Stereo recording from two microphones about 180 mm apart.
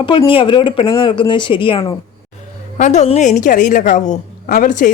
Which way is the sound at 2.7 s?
40° left (ahead or behind).